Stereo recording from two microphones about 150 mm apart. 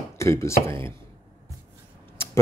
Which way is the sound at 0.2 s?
20° left (ahead or behind).